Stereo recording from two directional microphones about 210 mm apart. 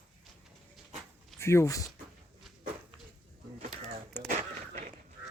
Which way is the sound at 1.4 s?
15° left (ahead or behind).